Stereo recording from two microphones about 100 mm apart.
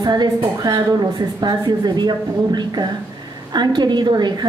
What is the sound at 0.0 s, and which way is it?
A woman's voice, 45° right (ahead or behind).